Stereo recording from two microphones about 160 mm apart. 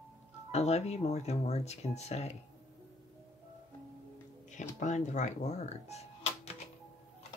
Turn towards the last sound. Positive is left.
turn(degrees=40)  # may be behind; listen again after turning